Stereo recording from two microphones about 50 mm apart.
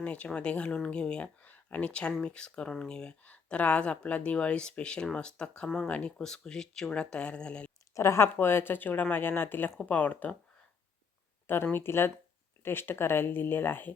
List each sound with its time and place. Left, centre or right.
0.0 s speech: left
3.2 s speech: left
5.6 s speech: centre
7.9 s speech: left
9.9 s speech: left
11.4 s speech: left